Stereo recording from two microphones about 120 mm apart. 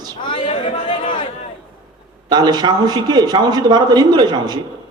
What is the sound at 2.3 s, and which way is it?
A man's voice, 35° right (ahead or behind).